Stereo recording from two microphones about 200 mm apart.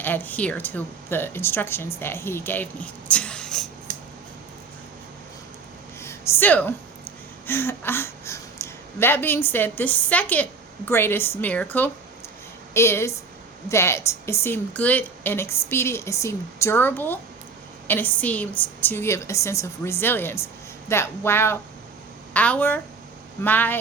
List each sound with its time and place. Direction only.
0.0 s a woman's voice: 10° left (ahead or behind)
3.9 s scissors: 45° right (ahead or behind)
6.0 s a sound: 15° left (ahead or behind)
7.4 s a woman's voice: 10° left (ahead or behind)